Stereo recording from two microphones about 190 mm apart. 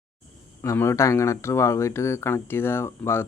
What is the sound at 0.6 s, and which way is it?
Speech, 15° left (ahead or behind).